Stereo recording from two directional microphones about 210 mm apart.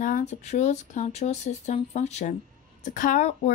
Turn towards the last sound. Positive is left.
turn(degrees=35)  # may be behind; listen again after turning